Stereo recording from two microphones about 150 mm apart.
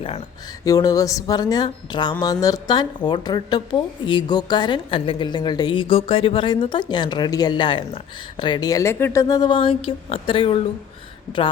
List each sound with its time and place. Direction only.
0.6 s a woman's voice: 25° left (ahead or behind)